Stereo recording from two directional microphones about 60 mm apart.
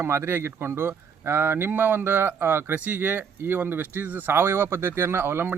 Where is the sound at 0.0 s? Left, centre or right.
Right.